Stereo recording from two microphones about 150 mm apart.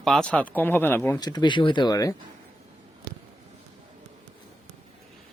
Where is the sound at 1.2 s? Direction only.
30° left (ahead or behind).